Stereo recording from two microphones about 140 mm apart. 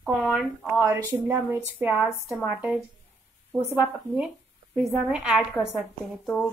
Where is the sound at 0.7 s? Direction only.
15° right (ahead or behind).